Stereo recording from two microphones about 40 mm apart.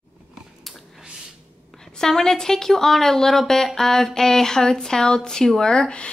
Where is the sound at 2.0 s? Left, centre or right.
Centre.